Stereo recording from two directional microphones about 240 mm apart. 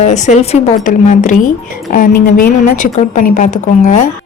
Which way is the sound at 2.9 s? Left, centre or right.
Left.